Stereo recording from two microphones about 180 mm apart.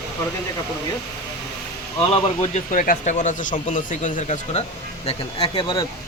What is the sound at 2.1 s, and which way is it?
Speech, 40° left (ahead or behind).